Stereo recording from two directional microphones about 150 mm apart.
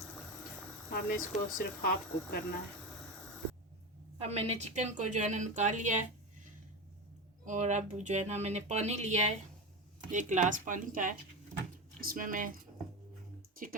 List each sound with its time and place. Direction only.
0.9 s speech: 80° left
4.2 s speech: 45° right (ahead or behind)
7.4 s speech: 55° right (ahead or behind)
11.9 s speech: 70° right (ahead or behind)